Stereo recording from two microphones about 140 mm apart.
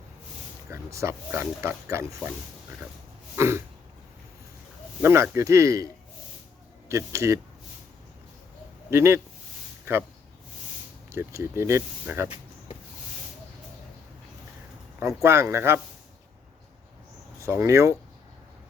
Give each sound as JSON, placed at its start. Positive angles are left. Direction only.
{"t": 0.7, "sound": "speech", "side_deg": -20}
{"t": 3.3, "sound": "speech", "side_deg": -20}
{"t": 5.0, "sound": "speech", "side_deg": -20}
{"t": 8.9, "sound": "speech", "side_deg": -20}
{"t": 11.1, "sound": "speech", "side_deg": -20}
{"t": 14.9, "sound": "speech", "side_deg": -20}
{"t": 17.4, "sound": "speech", "side_deg": -20}